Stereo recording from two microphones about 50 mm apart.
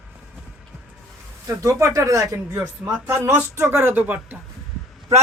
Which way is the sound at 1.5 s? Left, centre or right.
Right.